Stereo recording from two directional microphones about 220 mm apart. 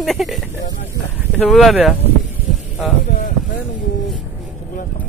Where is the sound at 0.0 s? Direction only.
Centre (ahead or behind).